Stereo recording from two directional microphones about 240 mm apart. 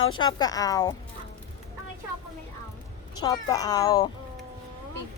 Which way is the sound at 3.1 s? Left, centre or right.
Centre.